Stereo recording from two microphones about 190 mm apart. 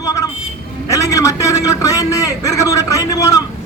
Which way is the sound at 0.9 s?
15° left (ahead or behind).